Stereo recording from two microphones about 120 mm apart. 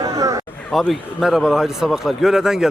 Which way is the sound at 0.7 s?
Centre (ahead or behind).